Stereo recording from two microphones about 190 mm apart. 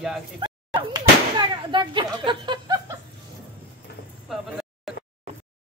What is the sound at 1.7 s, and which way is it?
Speech, 25° right (ahead or behind).